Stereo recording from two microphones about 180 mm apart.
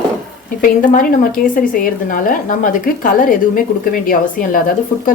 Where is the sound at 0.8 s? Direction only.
50° left (ahead or behind).